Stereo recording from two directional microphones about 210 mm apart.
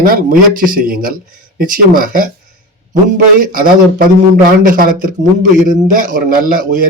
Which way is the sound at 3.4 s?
40° right (ahead or behind).